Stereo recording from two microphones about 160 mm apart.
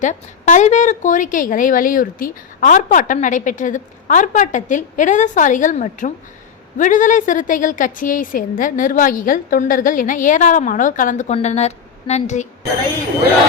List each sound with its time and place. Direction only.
0.0 s a woman's voice: 50° left (ahead or behind)
11.3 s a woman's voice: 45° left (ahead or behind)